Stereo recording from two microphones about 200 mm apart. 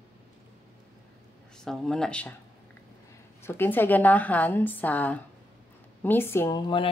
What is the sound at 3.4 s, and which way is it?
A woman's voice, 10° left (ahead or behind).